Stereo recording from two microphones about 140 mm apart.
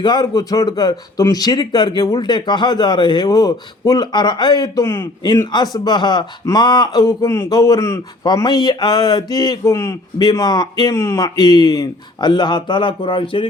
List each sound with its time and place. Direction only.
0.0 s speech: 30° left (ahead or behind)